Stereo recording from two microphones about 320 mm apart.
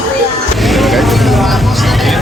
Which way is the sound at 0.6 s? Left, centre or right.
Centre.